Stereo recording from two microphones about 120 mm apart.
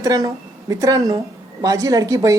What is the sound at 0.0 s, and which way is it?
A woman's voice, 30° right (ahead or behind).